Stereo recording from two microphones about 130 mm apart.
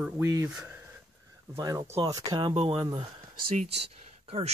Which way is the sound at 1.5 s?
30° right (ahead or behind).